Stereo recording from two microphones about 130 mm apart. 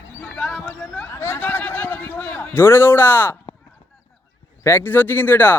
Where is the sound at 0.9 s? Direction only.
15° left (ahead or behind).